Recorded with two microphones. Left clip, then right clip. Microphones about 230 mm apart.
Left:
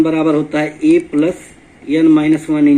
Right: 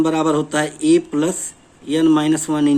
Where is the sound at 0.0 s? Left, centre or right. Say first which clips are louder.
Left 4 dB; right.